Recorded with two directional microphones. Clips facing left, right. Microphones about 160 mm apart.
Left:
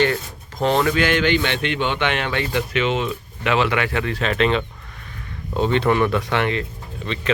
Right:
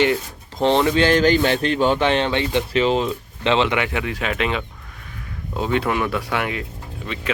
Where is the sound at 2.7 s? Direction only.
35° right (ahead or behind).